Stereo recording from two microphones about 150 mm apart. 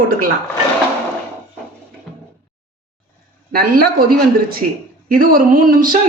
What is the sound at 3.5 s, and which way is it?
Speech, 85° right.